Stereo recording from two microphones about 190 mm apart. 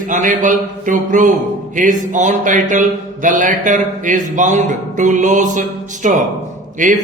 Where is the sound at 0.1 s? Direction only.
40° right (ahead or behind).